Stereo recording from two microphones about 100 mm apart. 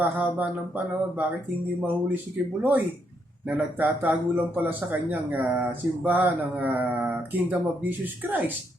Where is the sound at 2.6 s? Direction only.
15° right (ahead or behind).